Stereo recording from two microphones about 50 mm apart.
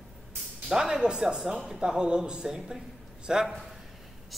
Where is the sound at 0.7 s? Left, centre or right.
Centre.